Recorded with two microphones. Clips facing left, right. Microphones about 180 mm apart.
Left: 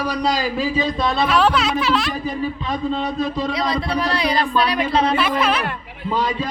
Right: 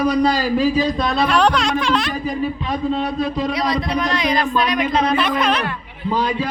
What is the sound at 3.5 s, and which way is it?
Speech, 25° left (ahead or behind).